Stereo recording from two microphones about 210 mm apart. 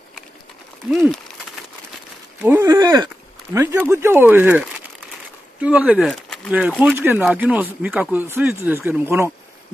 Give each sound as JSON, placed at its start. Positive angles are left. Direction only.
{"t": 0.9, "sound": "speech", "side_deg": 0}
{"t": 2.4, "sound": "speech", "side_deg": -10}